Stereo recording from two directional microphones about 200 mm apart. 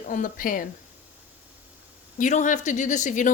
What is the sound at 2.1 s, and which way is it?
Speech, 40° left (ahead or behind).